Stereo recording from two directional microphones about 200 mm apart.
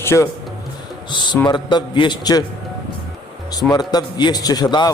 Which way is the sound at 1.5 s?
20° left (ahead or behind).